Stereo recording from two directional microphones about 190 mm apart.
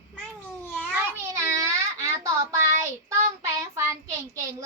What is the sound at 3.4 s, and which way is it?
Child singing, 15° right (ahead or behind).